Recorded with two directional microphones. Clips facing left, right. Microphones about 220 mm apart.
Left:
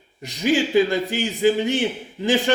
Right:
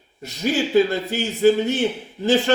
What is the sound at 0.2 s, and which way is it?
A man's voice, 15° left (ahead or behind).